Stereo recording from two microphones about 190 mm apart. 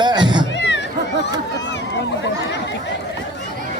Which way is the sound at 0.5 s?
70° left (ahead or behind).